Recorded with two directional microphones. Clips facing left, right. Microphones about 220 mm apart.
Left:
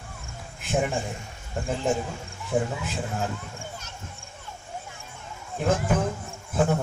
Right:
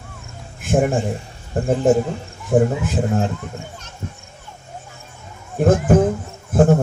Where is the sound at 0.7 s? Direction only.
50° right (ahead or behind).